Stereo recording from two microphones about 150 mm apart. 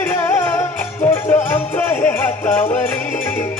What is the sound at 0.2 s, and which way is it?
Music, 15° left (ahead or behind).